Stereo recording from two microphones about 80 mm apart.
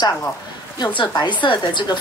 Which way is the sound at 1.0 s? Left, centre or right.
Left.